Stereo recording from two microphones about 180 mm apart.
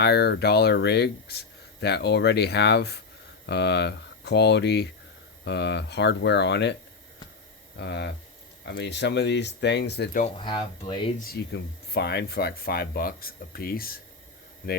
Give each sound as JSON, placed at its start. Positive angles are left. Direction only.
{"t": 0.0, "sound": "speech", "side_deg": 60}
{"t": 7.8, "sound": "speech", "side_deg": 70}
{"t": 10.3, "sound": "speech", "side_deg": 25}
{"t": 11.2, "sound": "speech", "side_deg": 60}